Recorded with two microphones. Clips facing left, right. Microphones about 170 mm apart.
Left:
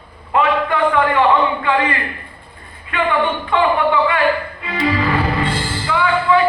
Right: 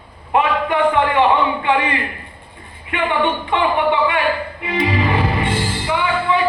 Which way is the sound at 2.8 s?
20° right (ahead or behind).